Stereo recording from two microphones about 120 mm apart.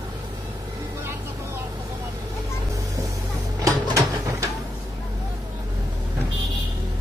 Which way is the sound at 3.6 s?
30° right (ahead or behind).